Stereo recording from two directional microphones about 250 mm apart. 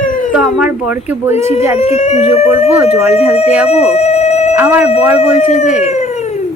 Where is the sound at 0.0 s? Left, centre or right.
Left.